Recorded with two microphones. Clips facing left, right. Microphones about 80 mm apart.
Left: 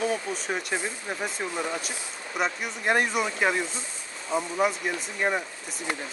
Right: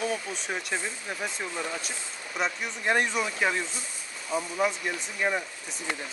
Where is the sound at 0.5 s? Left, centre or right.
Centre.